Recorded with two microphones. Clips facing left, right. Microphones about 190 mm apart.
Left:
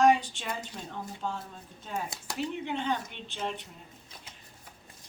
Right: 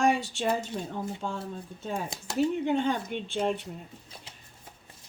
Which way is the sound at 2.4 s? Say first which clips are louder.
Right 8 dB; 45° right (ahead or behind).